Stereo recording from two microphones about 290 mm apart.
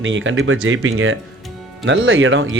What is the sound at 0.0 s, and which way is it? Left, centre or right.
Speech, right.